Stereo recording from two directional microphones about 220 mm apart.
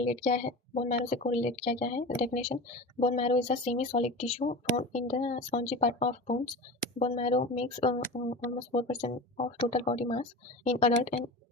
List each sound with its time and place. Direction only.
0.0 s speech: 30° left (ahead or behind)